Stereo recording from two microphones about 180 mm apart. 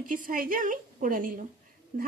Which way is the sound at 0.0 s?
50° right (ahead or behind).